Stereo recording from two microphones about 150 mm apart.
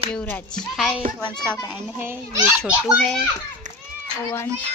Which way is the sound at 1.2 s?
30° left (ahead or behind).